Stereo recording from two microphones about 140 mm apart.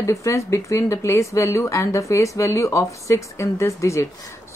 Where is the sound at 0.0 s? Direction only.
20° left (ahead or behind).